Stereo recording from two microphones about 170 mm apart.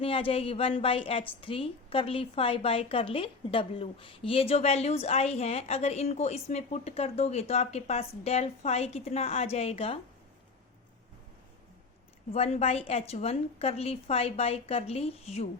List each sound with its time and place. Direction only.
0.0 s a woman's voice: 35° left (ahead or behind)
12.3 s a woman's voice: 35° left (ahead or behind)